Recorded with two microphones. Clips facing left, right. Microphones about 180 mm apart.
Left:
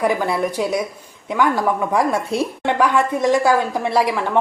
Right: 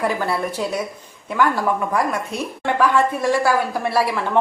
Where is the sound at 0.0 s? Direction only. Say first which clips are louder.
Left 3 dB; 15° left (ahead or behind).